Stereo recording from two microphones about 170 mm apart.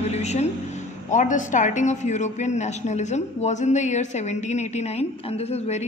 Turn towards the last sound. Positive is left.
turn(degrees=40)  # may be behind; listen again after turning